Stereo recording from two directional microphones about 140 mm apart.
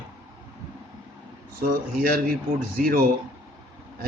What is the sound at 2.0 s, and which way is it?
A man's voice, 90° right.